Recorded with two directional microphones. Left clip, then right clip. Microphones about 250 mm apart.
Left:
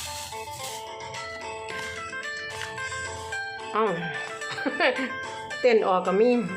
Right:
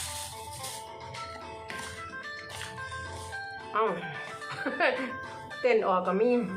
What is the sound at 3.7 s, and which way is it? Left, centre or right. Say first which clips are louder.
Speech: left 3 dB; left.